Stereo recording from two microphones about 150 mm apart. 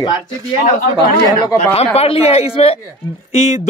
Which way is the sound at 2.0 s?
45° left (ahead or behind).